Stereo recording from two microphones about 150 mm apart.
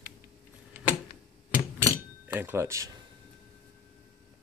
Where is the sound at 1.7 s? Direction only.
15° right (ahead or behind).